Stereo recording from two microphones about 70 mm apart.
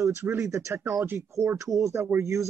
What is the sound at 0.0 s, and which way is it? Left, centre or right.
Speech, right.